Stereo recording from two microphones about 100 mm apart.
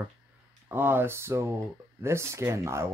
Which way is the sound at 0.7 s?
20° right (ahead or behind).